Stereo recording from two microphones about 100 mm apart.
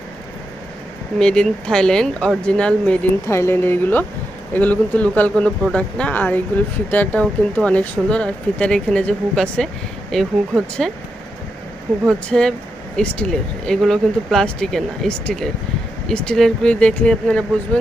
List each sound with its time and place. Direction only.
1.2 s speech: 5° left (ahead or behind)
3.2 s speech: 25° left (ahead or behind); by 10.9 s 5° left (ahead or behind)
12.0 s speech: 5° left (ahead or behind)